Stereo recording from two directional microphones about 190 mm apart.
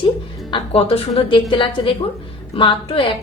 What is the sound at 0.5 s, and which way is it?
A woman's voice, 30° left (ahead or behind).